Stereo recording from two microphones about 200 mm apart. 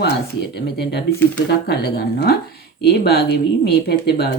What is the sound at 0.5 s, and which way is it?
Speech, 55° left (ahead or behind).